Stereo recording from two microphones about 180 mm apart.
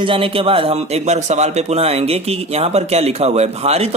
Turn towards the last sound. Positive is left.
turn(degrees=-35)  # may be behind; listen again after turning